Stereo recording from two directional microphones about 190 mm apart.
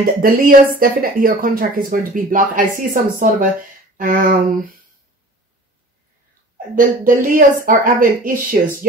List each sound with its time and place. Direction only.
0.0 s speech: 50° right (ahead or behind)
7.1 s speech: 45° right (ahead or behind)